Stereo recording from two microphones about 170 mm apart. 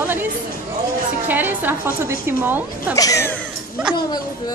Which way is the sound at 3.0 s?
20° left (ahead or behind).